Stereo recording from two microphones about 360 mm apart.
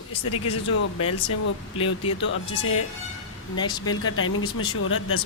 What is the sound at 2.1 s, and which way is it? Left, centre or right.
Speech, left.